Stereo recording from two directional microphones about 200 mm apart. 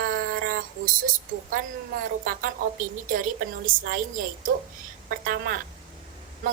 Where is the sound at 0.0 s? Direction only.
45° right (ahead or behind).